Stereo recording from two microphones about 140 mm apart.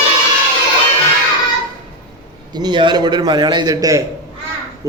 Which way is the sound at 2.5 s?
30° right (ahead or behind).